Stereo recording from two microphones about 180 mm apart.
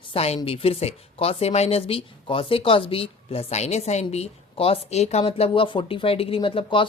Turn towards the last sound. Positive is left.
turn(degrees=30)  # may be behind; listen again after turning